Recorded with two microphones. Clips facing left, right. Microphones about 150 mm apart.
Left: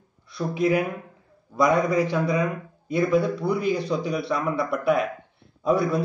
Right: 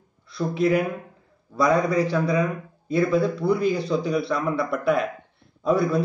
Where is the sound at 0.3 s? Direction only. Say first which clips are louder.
Right 1 dB; 15° left (ahead or behind).